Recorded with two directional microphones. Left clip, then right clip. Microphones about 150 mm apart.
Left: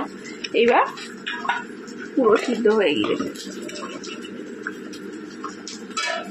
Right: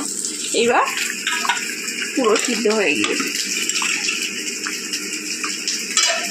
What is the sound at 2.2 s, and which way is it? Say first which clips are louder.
Speech: even; 5° right (ahead or behind).